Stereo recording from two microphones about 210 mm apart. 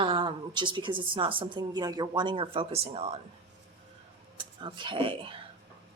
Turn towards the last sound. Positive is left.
turn(degrees=-25)  # may be behind; listen again after turning